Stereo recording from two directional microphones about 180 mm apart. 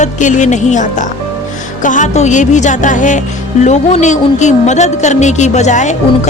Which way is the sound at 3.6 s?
40° left (ahead or behind).